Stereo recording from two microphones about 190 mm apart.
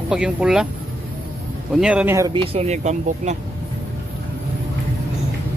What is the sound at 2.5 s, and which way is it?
Speech, 35° right (ahead or behind).